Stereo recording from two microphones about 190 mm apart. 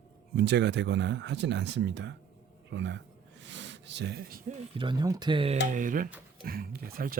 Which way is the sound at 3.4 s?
70° right (ahead or behind).